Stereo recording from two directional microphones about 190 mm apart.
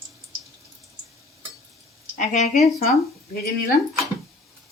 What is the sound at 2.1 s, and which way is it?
Speech, 40° left (ahead or behind).